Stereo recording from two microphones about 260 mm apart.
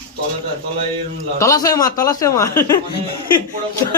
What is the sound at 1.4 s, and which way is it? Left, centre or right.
Speech, centre.